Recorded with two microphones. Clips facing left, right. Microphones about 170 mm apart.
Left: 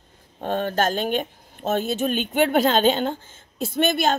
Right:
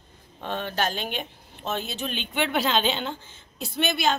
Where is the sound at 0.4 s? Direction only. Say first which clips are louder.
Left 6 dB; 45° left (ahead or behind).